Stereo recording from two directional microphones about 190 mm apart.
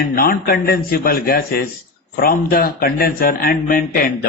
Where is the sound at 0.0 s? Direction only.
50° left (ahead or behind).